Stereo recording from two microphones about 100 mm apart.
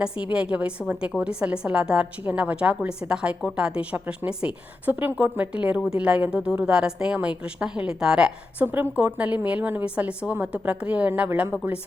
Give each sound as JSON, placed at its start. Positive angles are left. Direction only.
{"t": 0.0, "sound": "a woman's voice", "side_deg": -10}